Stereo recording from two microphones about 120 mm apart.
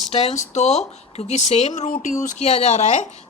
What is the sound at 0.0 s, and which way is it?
Speech, 60° left (ahead or behind).